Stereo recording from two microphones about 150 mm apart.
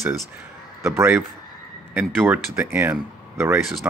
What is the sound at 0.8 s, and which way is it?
Speech, 15° right (ahead or behind).